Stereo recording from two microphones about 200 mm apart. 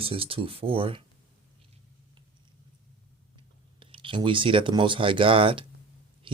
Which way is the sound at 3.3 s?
25° right (ahead or behind).